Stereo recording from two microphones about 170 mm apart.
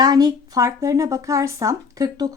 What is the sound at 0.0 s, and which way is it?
A woman's voice, 25° right (ahead or behind).